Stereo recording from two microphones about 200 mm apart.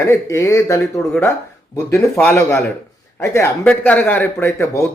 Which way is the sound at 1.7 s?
15° left (ahead or behind).